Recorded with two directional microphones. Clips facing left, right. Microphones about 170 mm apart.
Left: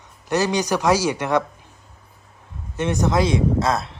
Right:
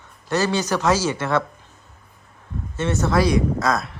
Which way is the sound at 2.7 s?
15° left (ahead or behind).